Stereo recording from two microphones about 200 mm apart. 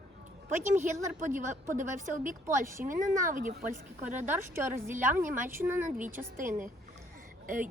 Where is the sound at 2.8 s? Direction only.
10° right (ahead or behind).